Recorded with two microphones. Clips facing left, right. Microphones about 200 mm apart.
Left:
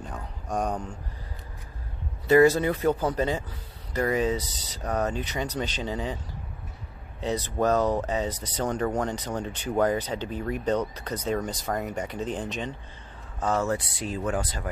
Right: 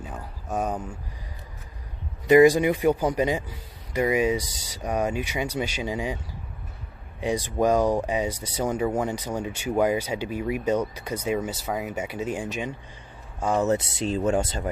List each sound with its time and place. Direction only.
0.0 s speech: 5° right (ahead or behind)
2.2 s speech: 15° right (ahead or behind)
7.2 s speech: 10° right (ahead or behind)